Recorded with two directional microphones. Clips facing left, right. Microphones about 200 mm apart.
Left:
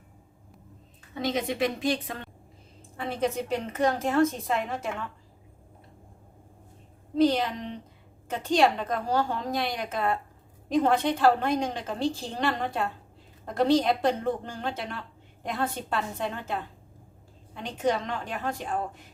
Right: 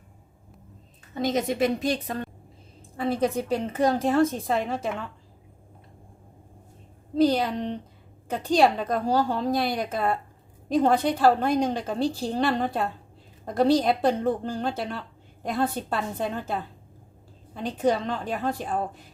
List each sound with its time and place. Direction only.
1.1 s a woman's voice: 40° right (ahead or behind)
3.7 s a woman's voice: 35° right (ahead or behind)
7.2 s a woman's voice: 35° right (ahead or behind)